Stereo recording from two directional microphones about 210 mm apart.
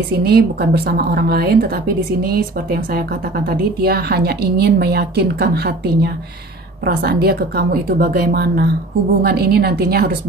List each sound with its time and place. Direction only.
0.2 s speech: 50° right (ahead or behind)